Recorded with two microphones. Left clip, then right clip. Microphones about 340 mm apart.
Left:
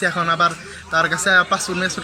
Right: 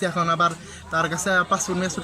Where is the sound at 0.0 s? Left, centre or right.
Centre.